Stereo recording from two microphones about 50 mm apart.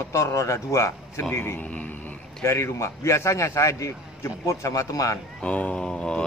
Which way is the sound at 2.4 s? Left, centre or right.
Left.